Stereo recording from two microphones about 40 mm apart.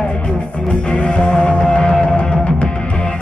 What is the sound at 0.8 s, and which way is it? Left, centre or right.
Music, left.